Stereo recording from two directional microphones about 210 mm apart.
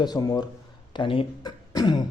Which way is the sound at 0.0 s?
20° left (ahead or behind).